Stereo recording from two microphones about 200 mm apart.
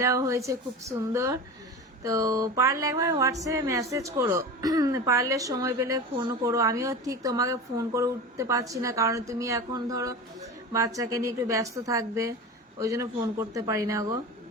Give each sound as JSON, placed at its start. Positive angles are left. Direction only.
{"t": 0.0, "sound": "speech", "side_deg": -15}